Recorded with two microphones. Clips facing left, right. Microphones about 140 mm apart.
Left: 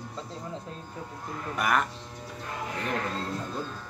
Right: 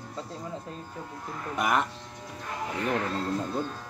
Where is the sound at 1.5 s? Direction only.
20° right (ahead or behind).